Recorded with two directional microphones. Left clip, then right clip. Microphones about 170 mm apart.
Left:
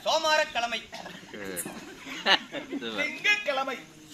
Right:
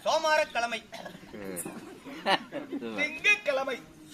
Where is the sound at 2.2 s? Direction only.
75° right (ahead or behind).